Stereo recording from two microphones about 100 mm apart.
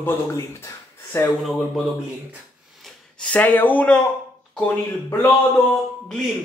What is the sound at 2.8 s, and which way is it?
Gasp, 10° left (ahead or behind).